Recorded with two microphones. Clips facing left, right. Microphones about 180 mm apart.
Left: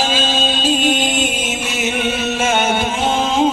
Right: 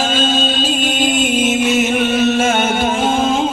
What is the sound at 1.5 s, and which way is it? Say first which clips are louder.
Music: right 7 dB; 50° right (ahead or behind).